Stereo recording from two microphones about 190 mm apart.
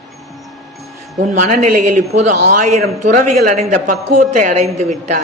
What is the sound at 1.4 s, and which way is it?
A man's voice, 45° right (ahead or behind).